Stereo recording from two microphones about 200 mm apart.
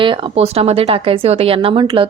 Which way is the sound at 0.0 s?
25° right (ahead or behind).